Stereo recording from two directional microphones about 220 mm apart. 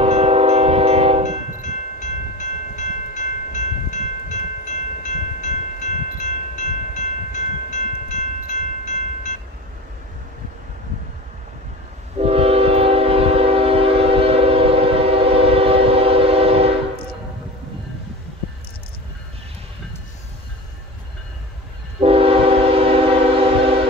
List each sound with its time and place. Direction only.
0.0 s train: 25° right (ahead or behind)
1.6 s train: 35° left (ahead or behind)
12.2 s train: 25° right (ahead or behind)
22.0 s train: 25° right (ahead or behind)